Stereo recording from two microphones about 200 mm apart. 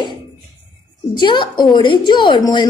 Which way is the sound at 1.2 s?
25° left (ahead or behind).